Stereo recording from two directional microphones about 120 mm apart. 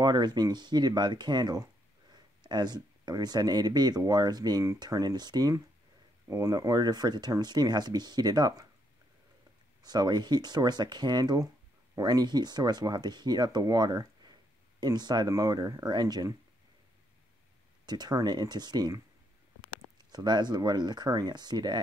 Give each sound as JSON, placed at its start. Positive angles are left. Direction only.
{"t": 0.0, "sound": "speech", "side_deg": -35}
{"t": 9.8, "sound": "speech", "side_deg": -35}
{"t": 17.8, "sound": "speech", "side_deg": -35}
{"t": 20.0, "sound": "speech", "side_deg": -35}